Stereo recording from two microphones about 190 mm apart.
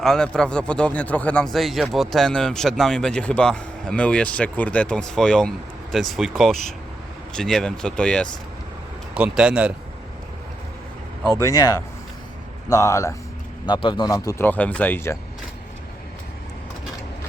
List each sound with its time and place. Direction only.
0.0 s speech: 5° left (ahead or behind)
9.1 s speech: 5° right (ahead or behind)
11.3 s a man's voice: 15° left (ahead or behind)